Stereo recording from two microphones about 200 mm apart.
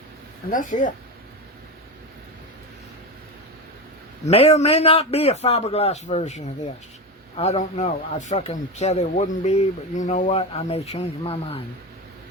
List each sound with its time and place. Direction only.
0.5 s a man's voice: 40° left (ahead or behind)
4.3 s a man's voice: 30° left (ahead or behind)